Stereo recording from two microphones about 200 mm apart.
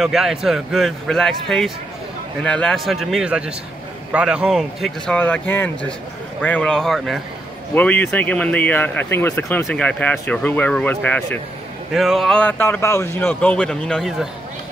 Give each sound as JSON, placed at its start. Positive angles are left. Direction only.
{"t": 0.0, "sound": "speech", "side_deg": 0}